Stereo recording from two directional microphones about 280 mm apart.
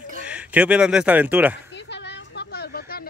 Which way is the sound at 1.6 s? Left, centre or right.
Left.